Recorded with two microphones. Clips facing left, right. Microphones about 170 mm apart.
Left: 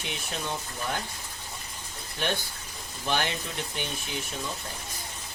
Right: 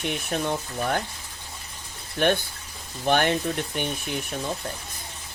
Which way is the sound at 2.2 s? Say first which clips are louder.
Right 8 dB; 55° right (ahead or behind).